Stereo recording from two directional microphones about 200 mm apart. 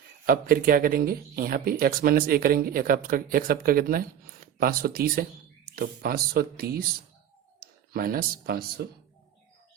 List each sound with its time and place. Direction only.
0.3 s speech: 45° right (ahead or behind)